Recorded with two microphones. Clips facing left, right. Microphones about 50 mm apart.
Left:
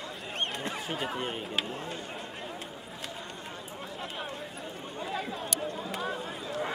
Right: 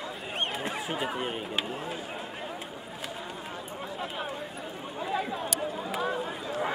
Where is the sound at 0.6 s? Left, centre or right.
Centre.